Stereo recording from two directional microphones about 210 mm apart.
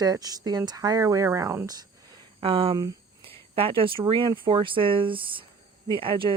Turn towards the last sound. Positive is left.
turn(degrees=-25)  # may be behind; listen again after turning